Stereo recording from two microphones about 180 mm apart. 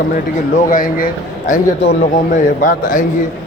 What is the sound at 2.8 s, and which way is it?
Speech, 50° left (ahead or behind).